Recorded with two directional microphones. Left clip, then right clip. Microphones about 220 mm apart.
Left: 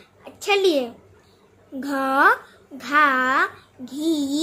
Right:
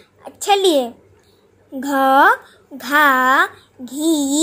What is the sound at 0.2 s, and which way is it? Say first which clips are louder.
Speech: right 4 dB; 25° right (ahead or behind).